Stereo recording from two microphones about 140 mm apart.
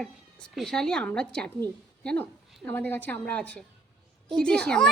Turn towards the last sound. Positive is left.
turn(degrees=5)  # may be behind; listen again after turning